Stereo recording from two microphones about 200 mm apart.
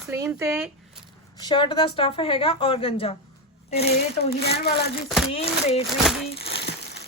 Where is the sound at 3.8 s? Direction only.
50° left (ahead or behind).